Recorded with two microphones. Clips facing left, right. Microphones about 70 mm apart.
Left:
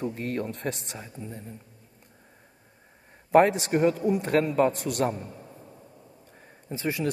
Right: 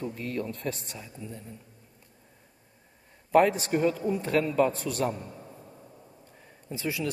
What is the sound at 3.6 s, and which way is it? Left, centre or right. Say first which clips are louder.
A man's voice: left 3 dB; left.